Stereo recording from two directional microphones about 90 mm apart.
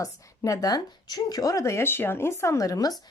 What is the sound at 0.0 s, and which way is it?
Speech, 40° left (ahead or behind).